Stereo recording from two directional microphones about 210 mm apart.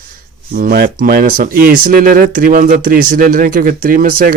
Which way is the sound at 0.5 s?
45° right (ahead or behind).